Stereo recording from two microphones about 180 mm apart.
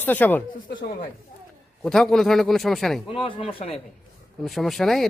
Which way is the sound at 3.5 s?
30° left (ahead or behind).